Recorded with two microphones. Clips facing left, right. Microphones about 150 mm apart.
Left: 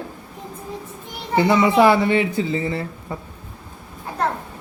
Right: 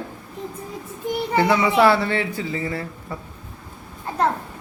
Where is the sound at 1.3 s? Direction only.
20° left (ahead or behind).